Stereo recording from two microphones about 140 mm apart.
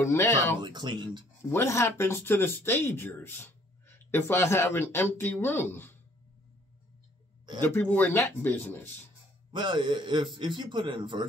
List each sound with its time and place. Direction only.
0.0 s speech: 20° left (ahead or behind)
0.6 s a man's voice: 35° right (ahead or behind)
1.5 s speech: 20° left (ahead or behind)
7.6 s speech: 15° left (ahead or behind)
9.5 s a man's voice: 35° right (ahead or behind)